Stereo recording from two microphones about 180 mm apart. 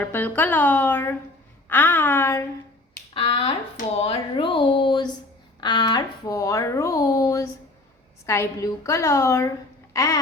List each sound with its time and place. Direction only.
0.0 s a woman's voice: 10° left (ahead or behind)
3.2 s a woman's voice: 30° left (ahead or behind)
9.9 s a sound: 20° left (ahead or behind)